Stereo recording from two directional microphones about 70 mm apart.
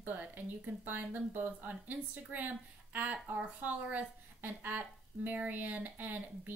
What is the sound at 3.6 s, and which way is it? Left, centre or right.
Speech, right.